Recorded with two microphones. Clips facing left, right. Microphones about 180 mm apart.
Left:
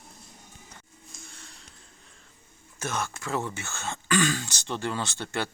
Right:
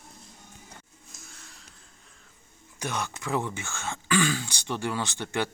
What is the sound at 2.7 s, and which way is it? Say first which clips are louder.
Speech: even; 15° right (ahead or behind).